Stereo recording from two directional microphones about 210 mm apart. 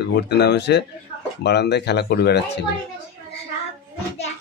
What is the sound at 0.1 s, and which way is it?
Speech, 50° left (ahead or behind).